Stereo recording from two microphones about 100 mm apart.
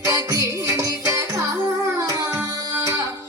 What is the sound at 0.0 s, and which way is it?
Music, 35° right (ahead or behind).